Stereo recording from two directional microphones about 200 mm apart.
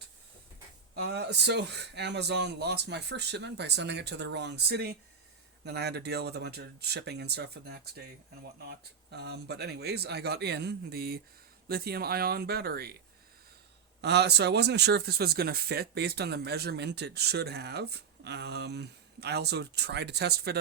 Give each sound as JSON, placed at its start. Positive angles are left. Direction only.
{"t": 1.1, "sound": "speech", "side_deg": -55}
{"t": 14.0, "sound": "speech", "side_deg": -55}